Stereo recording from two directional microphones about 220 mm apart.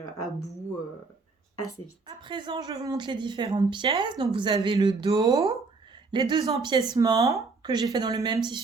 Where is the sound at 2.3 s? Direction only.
20° right (ahead or behind).